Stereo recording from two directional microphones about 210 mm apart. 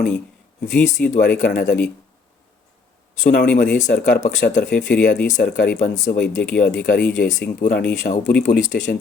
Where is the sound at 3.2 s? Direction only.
40° left (ahead or behind).